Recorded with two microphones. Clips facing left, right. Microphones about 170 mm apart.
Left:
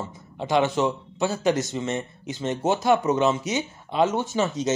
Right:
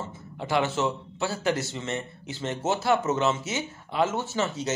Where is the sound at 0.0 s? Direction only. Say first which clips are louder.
Left 3 dB; 15° left (ahead or behind).